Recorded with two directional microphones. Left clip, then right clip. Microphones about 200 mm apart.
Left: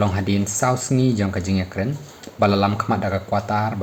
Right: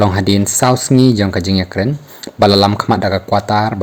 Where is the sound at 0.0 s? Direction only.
45° right (ahead or behind).